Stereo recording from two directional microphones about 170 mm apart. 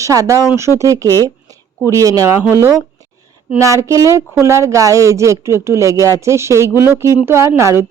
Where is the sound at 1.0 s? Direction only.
15° left (ahead or behind).